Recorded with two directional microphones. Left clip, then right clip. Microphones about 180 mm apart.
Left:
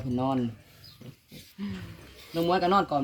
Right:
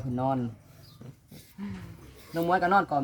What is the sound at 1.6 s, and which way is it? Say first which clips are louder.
Speech: left 3 dB; 15° right (ahead or behind).